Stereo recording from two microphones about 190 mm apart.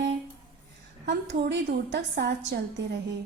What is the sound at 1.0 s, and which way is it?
A woman's voice, 65° right (ahead or behind).